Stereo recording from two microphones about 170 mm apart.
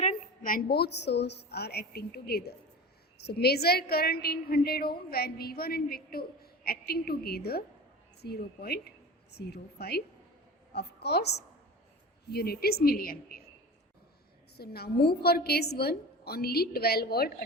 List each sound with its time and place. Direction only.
0.0 s a woman's voice: 50° left (ahead or behind)
14.5 s a woman's voice: 65° left (ahead or behind)